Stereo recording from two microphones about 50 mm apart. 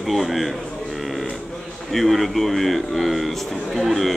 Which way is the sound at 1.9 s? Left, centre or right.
Centre.